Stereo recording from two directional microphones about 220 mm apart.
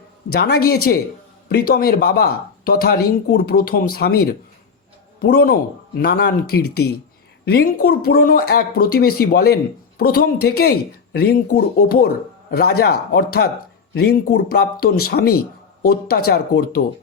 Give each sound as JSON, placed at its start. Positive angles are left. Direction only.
{"t": 0.3, "sound": "speech", "side_deg": 45}